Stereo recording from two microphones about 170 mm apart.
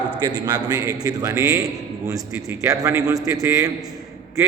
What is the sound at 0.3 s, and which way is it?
A man's voice, 25° right (ahead or behind).